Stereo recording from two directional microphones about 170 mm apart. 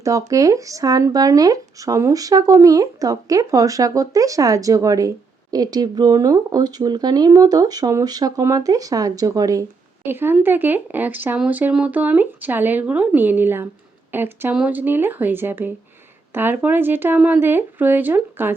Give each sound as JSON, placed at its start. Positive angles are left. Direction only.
{"t": 0.0, "sound": "speech", "side_deg": -20}